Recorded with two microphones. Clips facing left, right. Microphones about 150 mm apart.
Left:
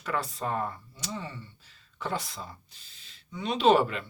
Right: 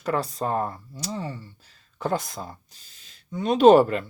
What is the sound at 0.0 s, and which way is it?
Speech, 40° right (ahead or behind).